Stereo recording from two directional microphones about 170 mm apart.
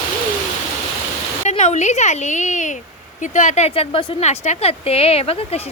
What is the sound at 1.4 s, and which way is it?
Speech, 40° left (ahead or behind).